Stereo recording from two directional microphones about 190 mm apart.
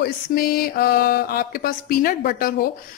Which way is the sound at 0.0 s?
50° left (ahead or behind).